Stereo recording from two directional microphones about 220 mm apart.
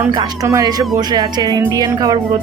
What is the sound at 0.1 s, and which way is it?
A woman's voice, 15° right (ahead or behind).